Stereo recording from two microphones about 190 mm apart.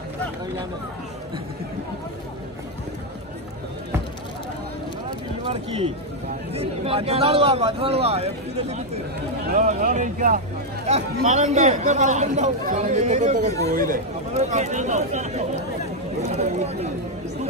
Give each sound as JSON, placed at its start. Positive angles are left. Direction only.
{"t": 6.5, "sound": "speech", "side_deg": -30}